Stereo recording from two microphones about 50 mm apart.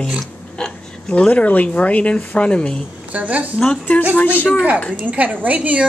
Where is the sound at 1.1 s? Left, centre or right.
Left.